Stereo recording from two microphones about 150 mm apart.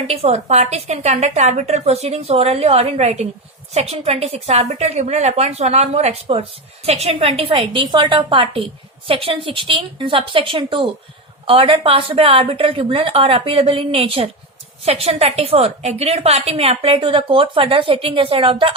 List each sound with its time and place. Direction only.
0.1 s a woman's voice: 45° right (ahead or behind)